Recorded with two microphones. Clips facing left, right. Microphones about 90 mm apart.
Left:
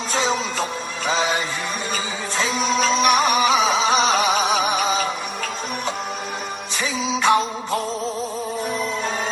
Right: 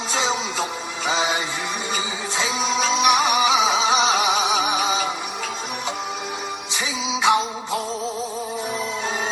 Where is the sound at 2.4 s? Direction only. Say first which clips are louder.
Left 2 dB; 45° left (ahead or behind).